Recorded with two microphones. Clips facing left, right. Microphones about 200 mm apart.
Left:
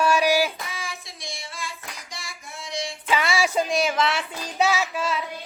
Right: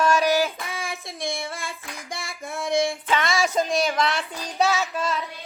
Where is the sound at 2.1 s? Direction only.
55° right (ahead or behind).